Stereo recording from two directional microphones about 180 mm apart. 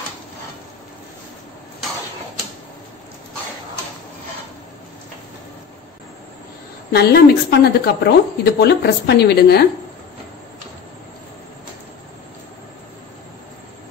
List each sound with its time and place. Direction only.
6.9 s a woman's voice: 60° left (ahead or behind)